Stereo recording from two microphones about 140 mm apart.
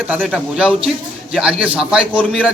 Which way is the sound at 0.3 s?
5° right (ahead or behind).